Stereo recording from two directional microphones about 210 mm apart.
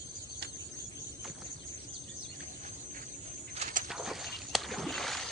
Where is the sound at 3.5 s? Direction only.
35° right (ahead or behind).